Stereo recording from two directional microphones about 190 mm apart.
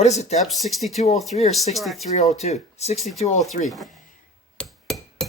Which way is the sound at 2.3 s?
35° left (ahead or behind).